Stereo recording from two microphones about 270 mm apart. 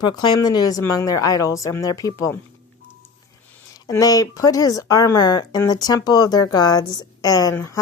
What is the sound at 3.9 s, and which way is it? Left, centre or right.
Speech, centre.